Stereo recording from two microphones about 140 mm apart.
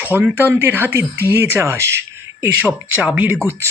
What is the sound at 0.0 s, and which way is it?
Speech, 10° right (ahead or behind).